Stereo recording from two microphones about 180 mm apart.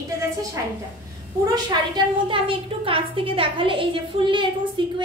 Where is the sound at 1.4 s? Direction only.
25° right (ahead or behind).